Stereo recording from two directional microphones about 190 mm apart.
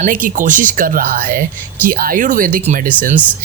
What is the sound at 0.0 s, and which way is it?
Speech, 45° right (ahead or behind).